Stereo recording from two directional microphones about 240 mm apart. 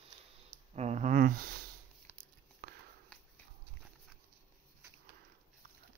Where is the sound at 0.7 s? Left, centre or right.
Right.